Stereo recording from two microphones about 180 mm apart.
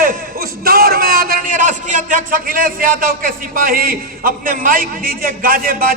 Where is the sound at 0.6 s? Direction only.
55° right (ahead or behind).